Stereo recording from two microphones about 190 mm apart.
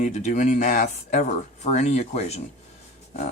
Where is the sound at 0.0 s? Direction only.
35° left (ahead or behind).